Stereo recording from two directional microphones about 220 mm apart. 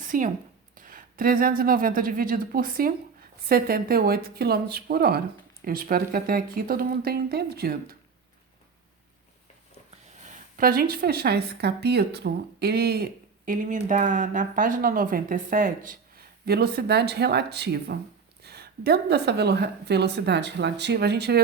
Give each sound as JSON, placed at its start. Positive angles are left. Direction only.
{"t": 0.0, "sound": "a sound", "side_deg": -35}
{"t": 0.8, "sound": "speech", "side_deg": -40}
{"t": 10.2, "sound": "speech", "side_deg": -40}